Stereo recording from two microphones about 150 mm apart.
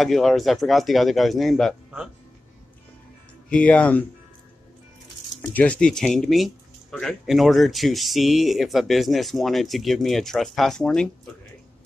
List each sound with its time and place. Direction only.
0.0 s speech: centre (ahead or behind)
3.4 s speech: 10° left (ahead or behind)
5.4 s speech: 10° left (ahead or behind)